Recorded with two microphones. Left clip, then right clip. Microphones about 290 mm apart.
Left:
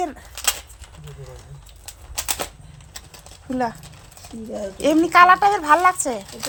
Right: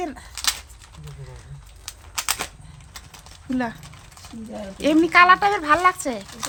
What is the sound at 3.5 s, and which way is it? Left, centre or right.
Speech, centre.